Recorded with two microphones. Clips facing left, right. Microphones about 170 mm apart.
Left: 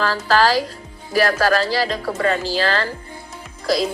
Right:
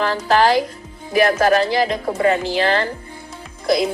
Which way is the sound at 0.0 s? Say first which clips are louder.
Right 1 dB; 20° right (ahead or behind).